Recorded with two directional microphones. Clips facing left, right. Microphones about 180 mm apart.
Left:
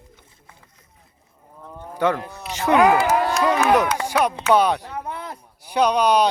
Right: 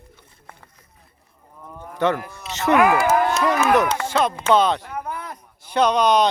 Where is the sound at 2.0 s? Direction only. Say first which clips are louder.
Even; 10° left (ahead or behind).